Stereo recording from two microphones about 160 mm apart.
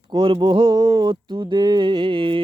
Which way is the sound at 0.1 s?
30° right (ahead or behind).